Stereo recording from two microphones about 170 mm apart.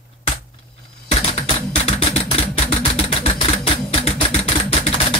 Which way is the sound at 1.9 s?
35° left (ahead or behind).